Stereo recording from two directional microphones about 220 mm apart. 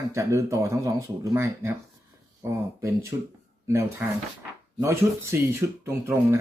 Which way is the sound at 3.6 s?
10° right (ahead or behind).